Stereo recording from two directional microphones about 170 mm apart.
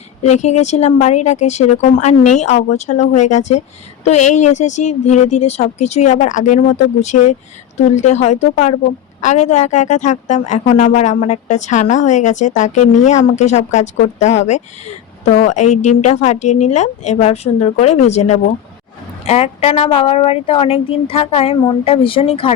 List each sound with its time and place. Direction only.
0.2 s a woman's voice: 40° left (ahead or behind)